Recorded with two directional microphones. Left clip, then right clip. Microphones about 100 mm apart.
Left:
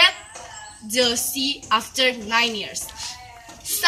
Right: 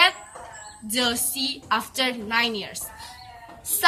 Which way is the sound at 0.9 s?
25° right (ahead or behind).